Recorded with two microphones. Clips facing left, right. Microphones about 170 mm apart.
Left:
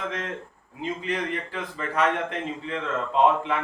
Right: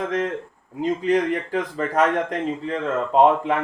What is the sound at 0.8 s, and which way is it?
A man's voice, 40° right (ahead or behind).